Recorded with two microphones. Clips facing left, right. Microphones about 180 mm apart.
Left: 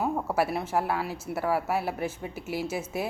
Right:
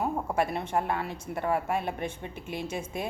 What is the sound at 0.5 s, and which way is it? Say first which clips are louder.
A woman's voice: left 1 dB; 5° left (ahead or behind).